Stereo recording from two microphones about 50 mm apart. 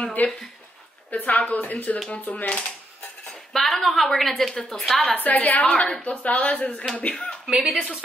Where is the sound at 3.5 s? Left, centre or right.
Centre.